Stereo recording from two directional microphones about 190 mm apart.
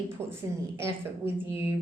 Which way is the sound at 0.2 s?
15° right (ahead or behind).